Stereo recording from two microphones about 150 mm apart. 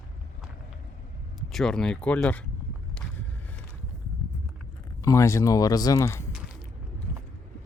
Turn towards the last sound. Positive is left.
turn(degrees=20)  # may be behind; listen again after turning